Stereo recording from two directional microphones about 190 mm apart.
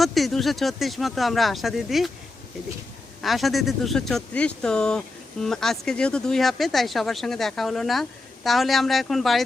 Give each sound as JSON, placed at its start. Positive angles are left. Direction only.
{"t": 0.0, "sound": "speech", "side_deg": 0}
{"t": 3.2, "sound": "speech", "side_deg": 0}